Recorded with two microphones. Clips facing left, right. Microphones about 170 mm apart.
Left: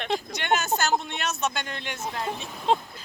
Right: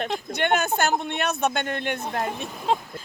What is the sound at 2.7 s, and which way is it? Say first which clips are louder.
Speech: left 1 dB; centre (ahead or behind).